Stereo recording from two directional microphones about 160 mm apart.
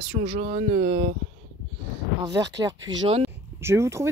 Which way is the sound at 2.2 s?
20° right (ahead or behind).